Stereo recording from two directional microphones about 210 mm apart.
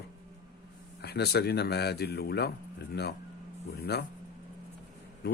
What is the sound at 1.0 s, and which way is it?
Speech, 50° left (ahead or behind).